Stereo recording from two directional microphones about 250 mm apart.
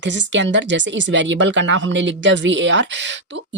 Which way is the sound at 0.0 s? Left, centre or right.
Right.